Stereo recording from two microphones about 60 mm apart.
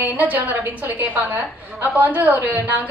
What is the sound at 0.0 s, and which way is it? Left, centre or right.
A woman's voice, right.